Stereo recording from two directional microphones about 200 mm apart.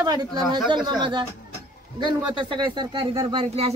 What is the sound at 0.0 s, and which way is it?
A man's voice, 20° right (ahead or behind).